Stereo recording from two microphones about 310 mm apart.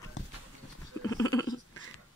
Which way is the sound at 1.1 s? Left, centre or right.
Centre.